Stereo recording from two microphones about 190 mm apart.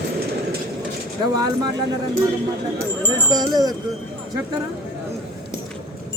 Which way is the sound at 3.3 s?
20° right (ahead or behind).